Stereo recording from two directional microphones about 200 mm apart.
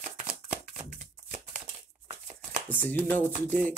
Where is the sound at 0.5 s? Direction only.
35° right (ahead or behind).